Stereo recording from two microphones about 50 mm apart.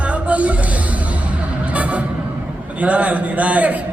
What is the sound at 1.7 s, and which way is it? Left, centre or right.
Music, right.